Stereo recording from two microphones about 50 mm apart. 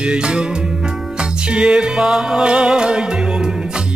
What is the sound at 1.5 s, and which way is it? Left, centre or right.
Music, centre.